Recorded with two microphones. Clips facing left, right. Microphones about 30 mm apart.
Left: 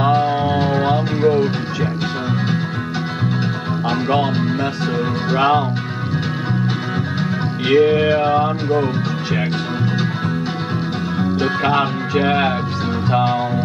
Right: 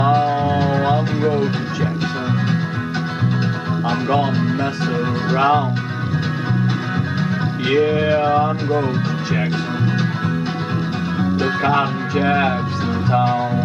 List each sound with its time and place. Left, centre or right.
0.0 s music: centre
5.3 s music: centre
7.7 s speech: centre
11.1 s music: centre
11.6 s speech: centre
13.1 s music: left